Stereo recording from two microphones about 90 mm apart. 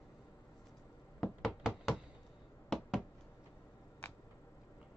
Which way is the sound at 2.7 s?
Centre (ahead or behind).